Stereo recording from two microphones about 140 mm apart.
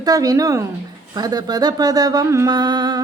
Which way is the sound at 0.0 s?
25° right (ahead or behind).